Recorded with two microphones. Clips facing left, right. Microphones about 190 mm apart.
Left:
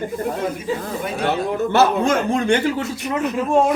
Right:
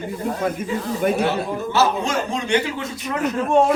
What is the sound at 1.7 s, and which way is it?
Speech, 55° left (ahead or behind).